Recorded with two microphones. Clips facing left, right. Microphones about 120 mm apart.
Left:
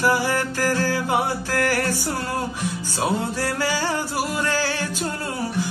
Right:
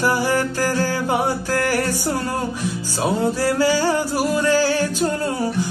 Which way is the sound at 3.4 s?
40° right (ahead or behind).